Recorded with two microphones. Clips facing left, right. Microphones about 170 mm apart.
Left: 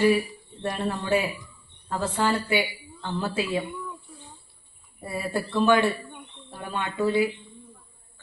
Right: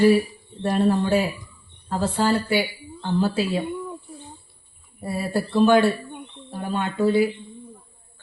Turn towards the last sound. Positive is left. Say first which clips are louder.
# right 4 dB
turn(degrees=-35)  # may be behind; listen again after turning